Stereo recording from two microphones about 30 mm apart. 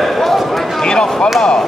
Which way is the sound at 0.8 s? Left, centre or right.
Left.